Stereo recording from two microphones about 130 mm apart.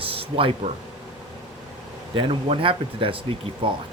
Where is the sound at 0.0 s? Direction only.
45° right (ahead or behind).